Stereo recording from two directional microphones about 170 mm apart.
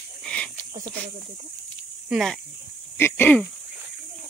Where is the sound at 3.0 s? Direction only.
10° left (ahead or behind).